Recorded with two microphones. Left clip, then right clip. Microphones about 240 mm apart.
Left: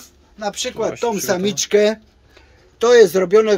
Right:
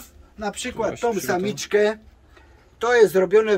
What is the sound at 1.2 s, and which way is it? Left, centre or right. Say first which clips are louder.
Speech: left 5 dB; left.